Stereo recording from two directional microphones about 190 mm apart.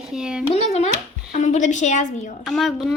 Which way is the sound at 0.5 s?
35° left (ahead or behind).